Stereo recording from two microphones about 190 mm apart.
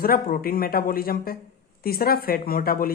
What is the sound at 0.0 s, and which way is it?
Speech, 50° left (ahead or behind).